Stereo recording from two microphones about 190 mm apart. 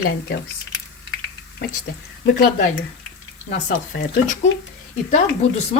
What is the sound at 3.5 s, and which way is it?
Speech, 40° left (ahead or behind).